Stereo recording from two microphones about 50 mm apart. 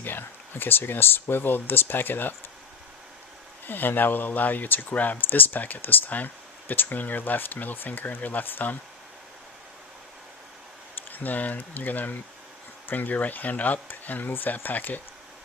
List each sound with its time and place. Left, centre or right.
0.0 s speech: left
3.7 s speech: left
11.1 s speech: left